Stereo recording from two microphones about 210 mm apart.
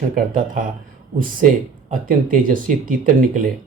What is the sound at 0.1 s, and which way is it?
Speech, 40° right (ahead or behind).